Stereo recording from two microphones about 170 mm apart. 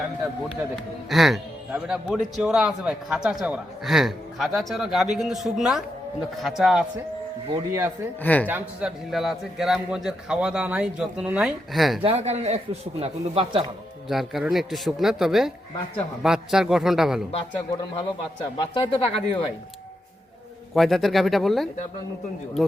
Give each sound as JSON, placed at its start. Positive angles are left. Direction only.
{"t": 1.1, "sound": "a man's voice", "side_deg": 0}
{"t": 7.5, "sound": "speech", "side_deg": -20}
{"t": 8.2, "sound": "speech", "side_deg": 10}
{"t": 8.4, "sound": "a man's voice", "side_deg": -10}
{"t": 12.0, "sound": "speech", "side_deg": -40}
{"t": 14.1, "sound": "a man's voice", "side_deg": 0}
{"t": 18.5, "sound": "speech", "side_deg": 30}
{"t": 20.7, "sound": "a man's voice", "side_deg": 0}